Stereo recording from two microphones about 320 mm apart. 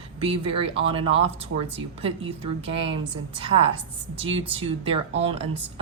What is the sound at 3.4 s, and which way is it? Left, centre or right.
Speech, centre.